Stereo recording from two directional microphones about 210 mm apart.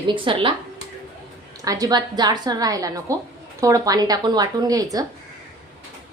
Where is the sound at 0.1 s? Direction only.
25° right (ahead or behind).